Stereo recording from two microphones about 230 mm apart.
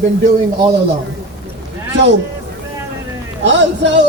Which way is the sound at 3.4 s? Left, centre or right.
Right.